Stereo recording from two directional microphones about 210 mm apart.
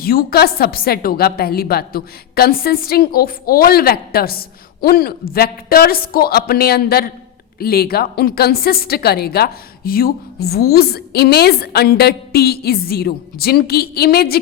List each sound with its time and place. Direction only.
0.0 s a woman's voice: 45° left (ahead or behind)